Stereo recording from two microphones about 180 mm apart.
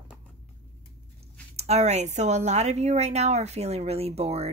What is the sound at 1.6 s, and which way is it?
Speech, 35° right (ahead or behind).